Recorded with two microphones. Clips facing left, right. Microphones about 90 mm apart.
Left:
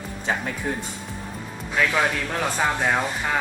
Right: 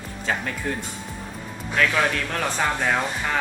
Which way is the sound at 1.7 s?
10° left (ahead or behind).